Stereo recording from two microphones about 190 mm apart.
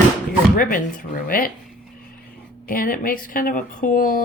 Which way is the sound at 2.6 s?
50° left (ahead or behind).